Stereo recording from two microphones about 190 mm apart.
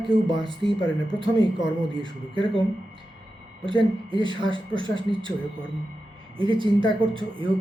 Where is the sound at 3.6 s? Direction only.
25° right (ahead or behind).